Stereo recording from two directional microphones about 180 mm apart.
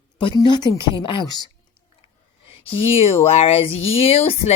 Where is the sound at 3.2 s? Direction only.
35° left (ahead or behind).